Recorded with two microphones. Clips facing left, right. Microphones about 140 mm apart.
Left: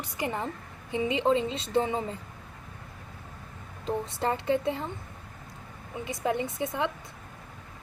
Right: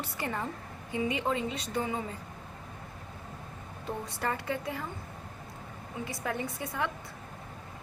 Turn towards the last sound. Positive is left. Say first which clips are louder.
# left 4 dB
turn(degrees=20)  # may be behind; listen again after turning